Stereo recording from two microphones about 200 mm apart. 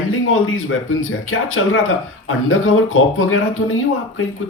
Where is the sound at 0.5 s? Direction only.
90° left.